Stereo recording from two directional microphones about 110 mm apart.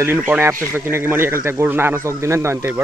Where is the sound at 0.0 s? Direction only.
20° right (ahead or behind).